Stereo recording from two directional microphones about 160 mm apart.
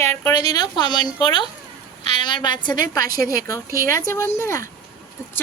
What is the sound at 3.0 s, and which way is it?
Speech, 65° right (ahead or behind).